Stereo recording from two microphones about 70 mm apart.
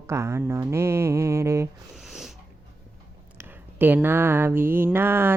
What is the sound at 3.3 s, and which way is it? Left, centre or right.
Mantra, right.